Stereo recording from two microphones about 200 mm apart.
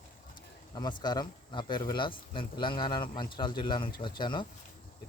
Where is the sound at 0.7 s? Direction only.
20° left (ahead or behind).